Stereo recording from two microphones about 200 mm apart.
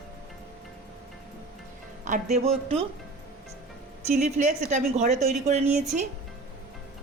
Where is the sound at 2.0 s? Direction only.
35° right (ahead or behind).